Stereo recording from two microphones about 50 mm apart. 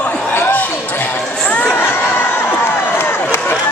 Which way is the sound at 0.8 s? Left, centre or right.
Left.